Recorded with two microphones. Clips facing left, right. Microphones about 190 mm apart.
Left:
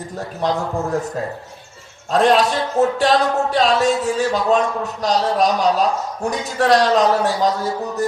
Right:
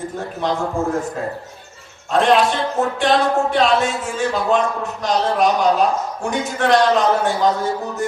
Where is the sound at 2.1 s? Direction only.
35° left (ahead or behind).